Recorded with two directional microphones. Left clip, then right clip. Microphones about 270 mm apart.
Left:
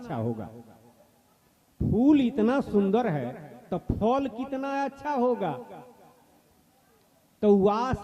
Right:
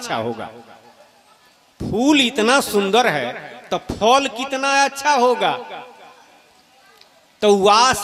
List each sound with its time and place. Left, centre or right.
0.0 s a man's voice: centre
2.0 s a man's voice: centre
7.3 s a man's voice: centre